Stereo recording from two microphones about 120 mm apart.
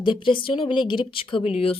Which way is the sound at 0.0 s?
45° left (ahead or behind).